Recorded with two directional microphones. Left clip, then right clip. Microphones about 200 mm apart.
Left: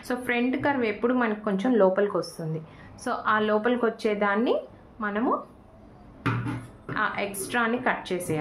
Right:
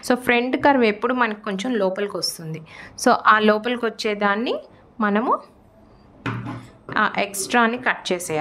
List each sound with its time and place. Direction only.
0.1 s a woman's voice: 60° right (ahead or behind)
6.9 s a woman's voice: 60° right (ahead or behind)